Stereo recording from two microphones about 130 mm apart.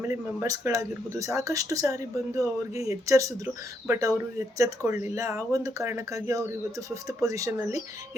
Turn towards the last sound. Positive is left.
turn(degrees=-25)  # may be behind; listen again after turning